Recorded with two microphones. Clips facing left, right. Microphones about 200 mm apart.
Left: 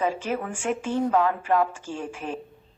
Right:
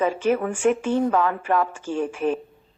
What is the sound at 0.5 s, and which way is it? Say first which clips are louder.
A woman's voice: right 6 dB; 55° right (ahead or behind).